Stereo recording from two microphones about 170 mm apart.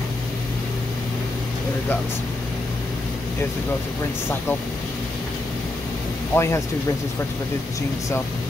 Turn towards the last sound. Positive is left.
turn(degrees=15)  # may be behind; listen again after turning